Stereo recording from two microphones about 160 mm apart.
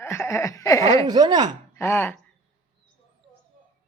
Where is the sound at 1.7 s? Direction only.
15° left (ahead or behind).